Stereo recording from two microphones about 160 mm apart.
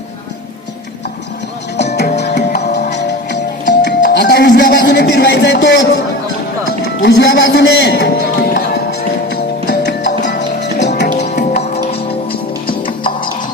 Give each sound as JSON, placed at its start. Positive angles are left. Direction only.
{"t": 1.7, "sound": "music", "side_deg": 90}
{"t": 7.0, "sound": "music", "side_deg": 90}
{"t": 11.5, "sound": "music", "side_deg": 40}